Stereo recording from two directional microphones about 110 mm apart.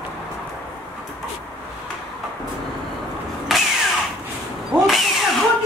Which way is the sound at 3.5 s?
Centre (ahead or behind).